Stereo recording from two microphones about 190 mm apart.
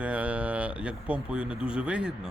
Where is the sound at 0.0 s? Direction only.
5° right (ahead or behind).